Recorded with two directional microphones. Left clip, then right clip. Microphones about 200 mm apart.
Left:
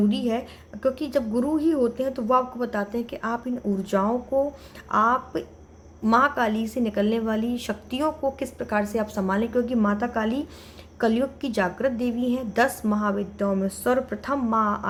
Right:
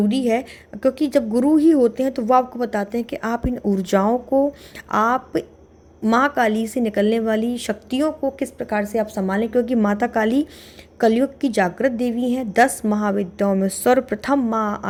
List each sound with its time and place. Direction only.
0.1 s a woman's voice: 30° right (ahead or behind)